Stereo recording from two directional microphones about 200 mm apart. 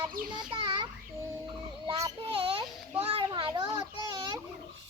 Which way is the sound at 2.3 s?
25° right (ahead or behind).